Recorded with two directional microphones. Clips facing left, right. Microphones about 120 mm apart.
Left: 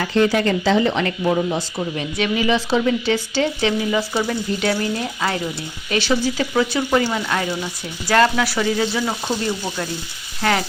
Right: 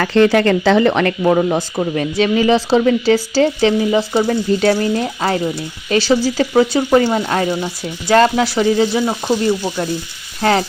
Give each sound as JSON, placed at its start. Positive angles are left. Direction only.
{"t": 0.0, "sound": "speech", "side_deg": -70}
{"t": 2.1, "sound": "speech", "side_deg": -35}
{"t": 10.4, "sound": "speech", "side_deg": -35}